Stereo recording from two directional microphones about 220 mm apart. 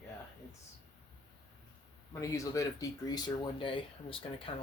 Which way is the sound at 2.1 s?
15° left (ahead or behind).